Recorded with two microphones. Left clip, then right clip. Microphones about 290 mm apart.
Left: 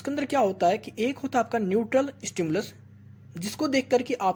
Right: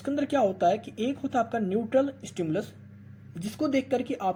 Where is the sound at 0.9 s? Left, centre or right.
Left.